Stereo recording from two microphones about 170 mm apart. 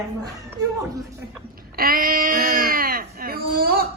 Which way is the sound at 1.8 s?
60° right (ahead or behind).